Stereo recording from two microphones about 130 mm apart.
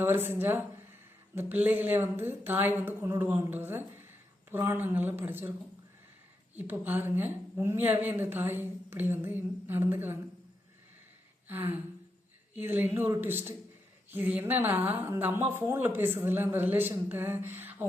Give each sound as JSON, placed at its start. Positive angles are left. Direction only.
{"t": 0.0, "sound": "a woman's voice", "side_deg": -15}
{"t": 6.6, "sound": "a woman's voice", "side_deg": -15}
{"t": 11.4, "sound": "a sound", "side_deg": -15}
{"t": 12.5, "sound": "a woman's voice", "side_deg": -15}